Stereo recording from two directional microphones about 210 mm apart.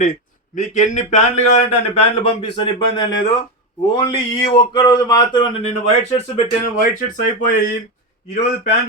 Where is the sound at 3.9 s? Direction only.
25° left (ahead or behind).